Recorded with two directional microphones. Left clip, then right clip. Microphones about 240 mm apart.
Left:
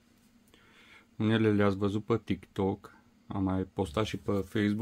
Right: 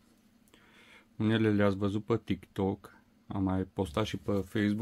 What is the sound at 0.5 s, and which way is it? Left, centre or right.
Speech, centre.